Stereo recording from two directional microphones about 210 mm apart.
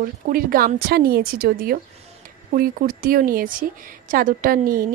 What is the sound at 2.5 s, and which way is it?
A woman's voice, 45° right (ahead or behind).